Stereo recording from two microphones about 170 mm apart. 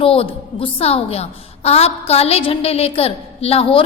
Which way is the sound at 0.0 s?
35° left (ahead or behind).